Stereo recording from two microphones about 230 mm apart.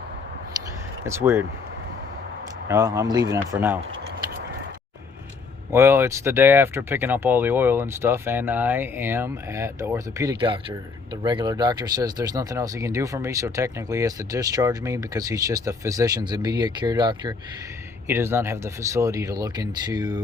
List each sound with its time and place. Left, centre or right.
0.6 s a sound: centre
1.0 s speech: centre
2.6 s speech: centre
5.7 s speech: centre